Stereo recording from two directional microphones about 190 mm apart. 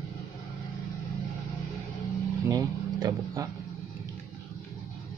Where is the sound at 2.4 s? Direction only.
20° right (ahead or behind).